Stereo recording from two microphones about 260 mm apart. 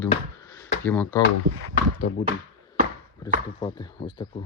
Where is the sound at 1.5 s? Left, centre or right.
Right.